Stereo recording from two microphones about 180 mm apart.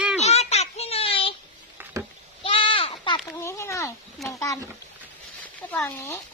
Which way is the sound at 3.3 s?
15° left (ahead or behind).